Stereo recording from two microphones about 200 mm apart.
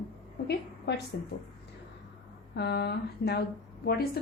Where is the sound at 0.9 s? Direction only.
55° left (ahead or behind).